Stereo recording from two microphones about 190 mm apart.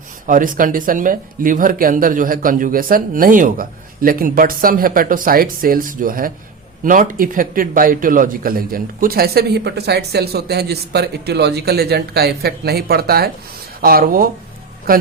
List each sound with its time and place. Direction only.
0.3 s a man's voice: 45° right (ahead or behind)